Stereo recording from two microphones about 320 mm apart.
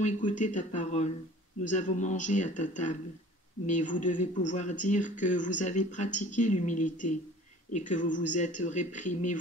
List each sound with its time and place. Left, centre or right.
0.0 s speech: left